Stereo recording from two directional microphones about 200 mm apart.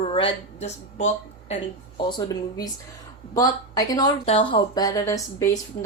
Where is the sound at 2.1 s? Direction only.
20° left (ahead or behind).